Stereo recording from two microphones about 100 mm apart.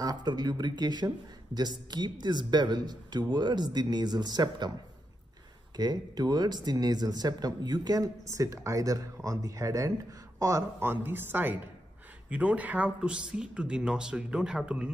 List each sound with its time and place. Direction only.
0.0 s speech: 45° right (ahead or behind)
5.8 s speech: 45° right (ahead or behind); by 14.9 s 10° right (ahead or behind)